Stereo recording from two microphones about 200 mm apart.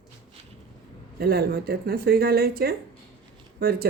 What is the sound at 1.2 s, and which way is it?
A woman's voice, 55° right (ahead or behind).